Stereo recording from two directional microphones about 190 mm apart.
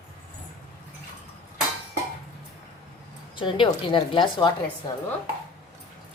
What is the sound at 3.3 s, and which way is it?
A woman's voice, 25° left (ahead or behind).